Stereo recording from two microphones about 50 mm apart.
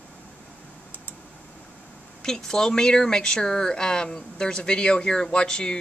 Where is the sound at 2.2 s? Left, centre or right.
Centre.